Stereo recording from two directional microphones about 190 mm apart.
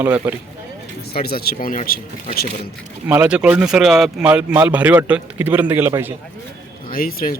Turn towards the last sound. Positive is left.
turn(degrees=50)  # may be behind; listen again after turning